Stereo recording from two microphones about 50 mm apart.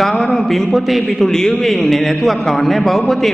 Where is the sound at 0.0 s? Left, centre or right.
Centre.